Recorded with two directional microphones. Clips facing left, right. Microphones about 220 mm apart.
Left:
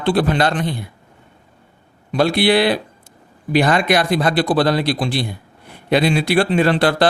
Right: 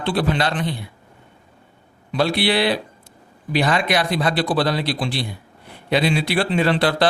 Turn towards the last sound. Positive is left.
turn(degrees=50)  # may be behind; listen again after turning